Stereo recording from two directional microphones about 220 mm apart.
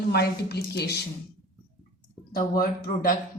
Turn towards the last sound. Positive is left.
turn(degrees=40)  # may be behind; listen again after turning